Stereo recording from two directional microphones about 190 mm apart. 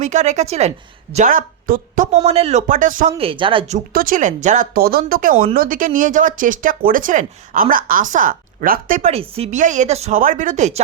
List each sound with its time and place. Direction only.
0.0 s speech: 40° right (ahead or behind)
3.2 s speech: 25° right (ahead or behind)
3.9 s speech: 45° right (ahead or behind)